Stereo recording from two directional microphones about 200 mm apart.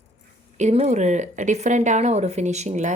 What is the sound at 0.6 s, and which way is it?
Speech, 30° right (ahead or behind).